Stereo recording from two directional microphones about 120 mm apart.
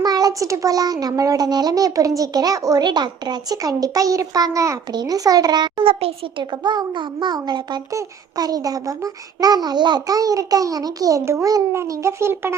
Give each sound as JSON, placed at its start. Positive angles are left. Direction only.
{"t": 0.0, "sound": "a child's voice", "side_deg": -35}
{"t": 5.8, "sound": "a child's voice", "side_deg": -55}
{"t": 6.4, "sound": "a child's voice", "side_deg": -40}